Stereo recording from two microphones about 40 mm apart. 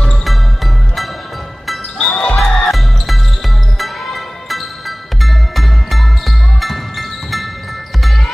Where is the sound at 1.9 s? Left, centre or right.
Left.